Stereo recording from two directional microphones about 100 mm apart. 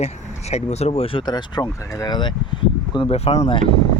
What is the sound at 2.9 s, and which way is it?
Speech, 70° left (ahead or behind).